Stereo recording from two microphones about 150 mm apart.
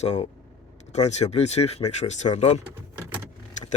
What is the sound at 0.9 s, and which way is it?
Speech, 50° left (ahead or behind).